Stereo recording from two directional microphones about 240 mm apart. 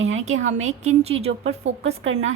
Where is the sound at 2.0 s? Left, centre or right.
Right.